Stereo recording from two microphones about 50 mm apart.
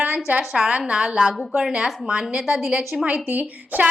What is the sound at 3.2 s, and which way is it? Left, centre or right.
Speech, right.